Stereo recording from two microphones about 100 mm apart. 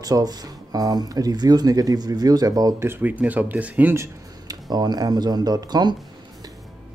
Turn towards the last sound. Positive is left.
turn(degrees=-45)  # may be behind; listen again after turning